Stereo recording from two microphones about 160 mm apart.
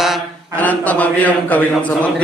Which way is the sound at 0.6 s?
10° left (ahead or behind).